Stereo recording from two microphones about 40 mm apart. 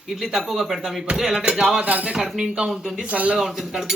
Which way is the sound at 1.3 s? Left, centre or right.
Centre.